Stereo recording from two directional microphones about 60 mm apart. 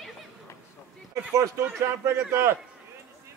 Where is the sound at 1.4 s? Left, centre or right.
Right.